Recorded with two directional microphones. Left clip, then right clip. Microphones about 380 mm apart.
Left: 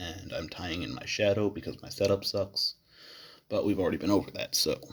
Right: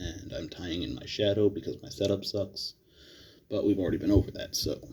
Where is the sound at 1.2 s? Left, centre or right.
Left.